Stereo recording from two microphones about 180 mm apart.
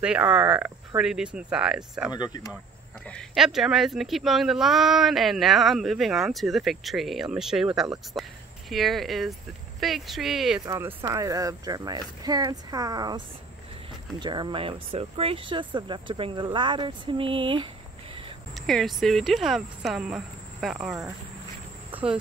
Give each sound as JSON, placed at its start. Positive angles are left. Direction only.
{"t": 0.0, "sound": "speech", "side_deg": -5}
{"t": 2.1, "sound": "speech", "side_deg": 20}
{"t": 3.1, "sound": "speech", "side_deg": 0}
{"t": 10.6, "sound": "speech", "side_deg": -15}
{"t": 14.2, "sound": "speech", "side_deg": -25}
{"t": 18.5, "sound": "speech", "side_deg": 0}
{"t": 21.9, "sound": "cricket", "side_deg": -10}